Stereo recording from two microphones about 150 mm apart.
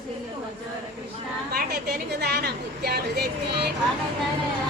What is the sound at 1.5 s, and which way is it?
A woman's voice, 90° right.